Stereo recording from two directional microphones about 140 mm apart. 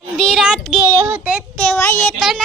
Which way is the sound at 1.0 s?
15° right (ahead or behind).